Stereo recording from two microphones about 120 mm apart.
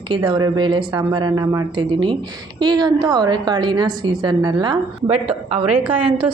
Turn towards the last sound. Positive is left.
turn(degrees=-45)  # may be behind; listen again after turning